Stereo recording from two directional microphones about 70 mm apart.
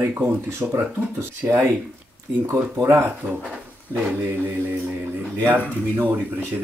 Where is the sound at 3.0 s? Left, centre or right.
Right.